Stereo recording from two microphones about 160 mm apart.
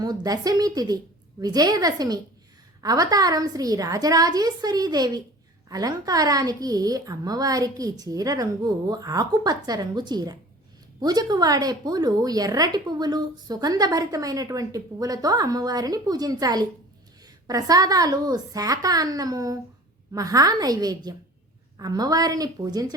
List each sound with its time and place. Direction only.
0.0 s speech: 25° right (ahead or behind)